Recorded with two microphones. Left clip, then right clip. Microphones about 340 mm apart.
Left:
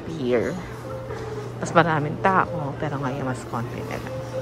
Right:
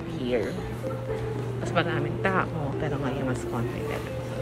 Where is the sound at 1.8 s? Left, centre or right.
Centre.